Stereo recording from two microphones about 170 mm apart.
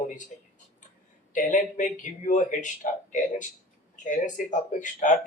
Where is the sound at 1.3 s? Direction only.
50° left (ahead or behind).